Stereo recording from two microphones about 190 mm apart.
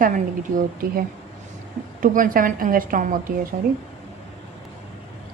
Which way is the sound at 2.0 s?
45° right (ahead or behind).